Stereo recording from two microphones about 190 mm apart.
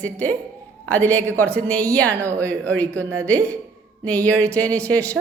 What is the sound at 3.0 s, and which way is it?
Speech, 15° right (ahead or behind).